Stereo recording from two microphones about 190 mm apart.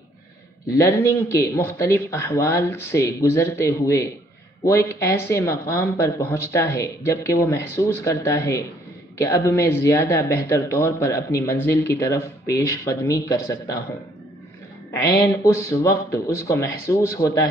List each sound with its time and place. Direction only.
0.7 s speech: 15° left (ahead or behind)
14.9 s speech: 15° left (ahead or behind)